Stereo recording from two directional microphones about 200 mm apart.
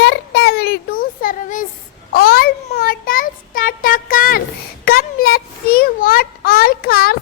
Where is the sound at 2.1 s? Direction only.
50° left (ahead or behind).